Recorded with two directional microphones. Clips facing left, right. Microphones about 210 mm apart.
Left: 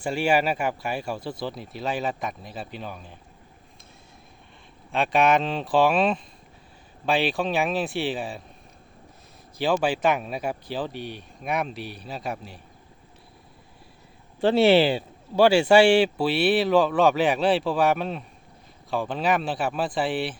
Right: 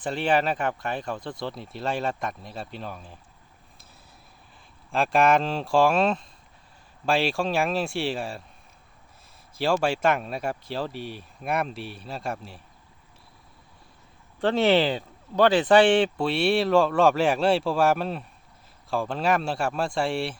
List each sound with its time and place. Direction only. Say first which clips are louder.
0.0 s speech: left 1 dB; 10° left (ahead or behind)
4.9 s speech: even; centre (ahead or behind)
9.6 s speech: left 1 dB; centre (ahead or behind)
14.4 s speech: left 3 dB; 15° left (ahead or behind)